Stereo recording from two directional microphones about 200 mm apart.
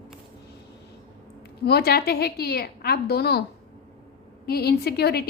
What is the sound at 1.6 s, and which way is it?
A woman's voice, 50° left (ahead or behind).